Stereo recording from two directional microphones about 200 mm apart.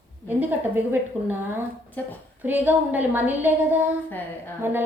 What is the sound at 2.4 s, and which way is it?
A woman's voice, 10° right (ahead or behind).